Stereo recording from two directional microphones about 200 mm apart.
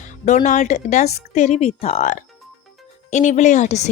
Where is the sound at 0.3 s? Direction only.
35° left (ahead or behind).